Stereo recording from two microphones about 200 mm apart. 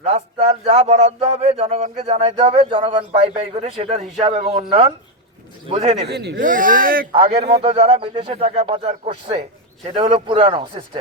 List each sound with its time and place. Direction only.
0.0 s a man's voice: 35° right (ahead or behind)
6.1 s speech: 55° right (ahead or behind)
6.4 s speech: 40° right (ahead or behind)
7.1 s a man's voice: 25° right (ahead or behind)